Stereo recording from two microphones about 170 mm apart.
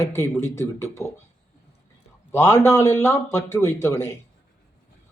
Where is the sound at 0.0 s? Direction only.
15° left (ahead or behind).